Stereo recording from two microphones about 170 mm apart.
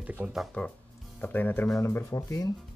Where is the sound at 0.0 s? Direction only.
10° right (ahead or behind).